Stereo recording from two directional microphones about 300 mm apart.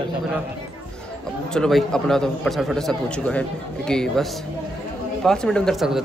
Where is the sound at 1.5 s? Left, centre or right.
Centre.